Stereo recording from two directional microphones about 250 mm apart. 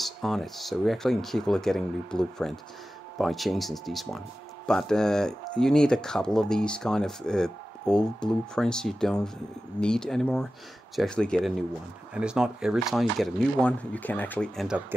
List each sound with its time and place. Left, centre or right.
0.0 s speech: centre